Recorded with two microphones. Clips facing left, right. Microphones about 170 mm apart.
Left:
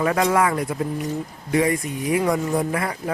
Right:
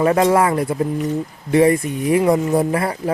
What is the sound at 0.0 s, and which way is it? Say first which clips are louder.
Speech: right 5 dB; 30° right (ahead or behind).